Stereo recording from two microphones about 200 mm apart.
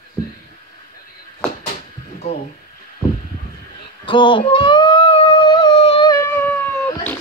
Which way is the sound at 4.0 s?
25° left (ahead or behind).